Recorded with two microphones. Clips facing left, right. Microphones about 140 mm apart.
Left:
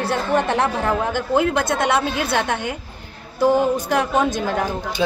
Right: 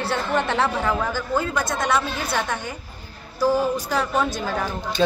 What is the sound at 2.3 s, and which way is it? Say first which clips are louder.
Speech: left 3 dB; 65° left (ahead or behind).